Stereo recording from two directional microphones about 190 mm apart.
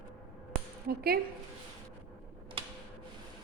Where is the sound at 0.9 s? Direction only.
55° right (ahead or behind).